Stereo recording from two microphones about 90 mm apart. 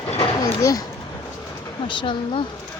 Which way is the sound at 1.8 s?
65° left (ahead or behind).